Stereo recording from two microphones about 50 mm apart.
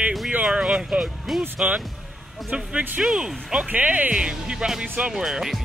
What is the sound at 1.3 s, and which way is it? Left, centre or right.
Speech, centre.